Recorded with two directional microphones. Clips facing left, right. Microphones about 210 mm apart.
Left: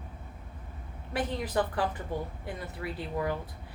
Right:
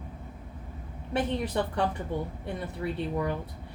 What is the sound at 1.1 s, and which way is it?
Speech, 25° right (ahead or behind).